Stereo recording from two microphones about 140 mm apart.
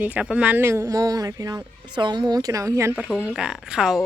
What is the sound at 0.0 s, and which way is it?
Speech, 10° right (ahead or behind).